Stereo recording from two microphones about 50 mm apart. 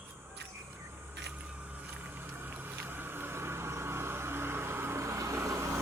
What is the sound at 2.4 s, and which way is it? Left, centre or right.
Boat, right.